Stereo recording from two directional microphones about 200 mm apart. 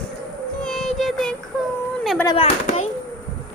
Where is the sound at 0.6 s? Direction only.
Centre (ahead or behind).